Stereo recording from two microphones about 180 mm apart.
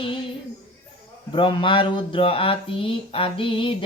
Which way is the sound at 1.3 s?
25° left (ahead or behind).